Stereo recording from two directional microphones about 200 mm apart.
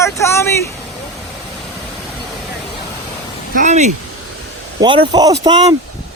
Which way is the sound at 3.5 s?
40° right (ahead or behind).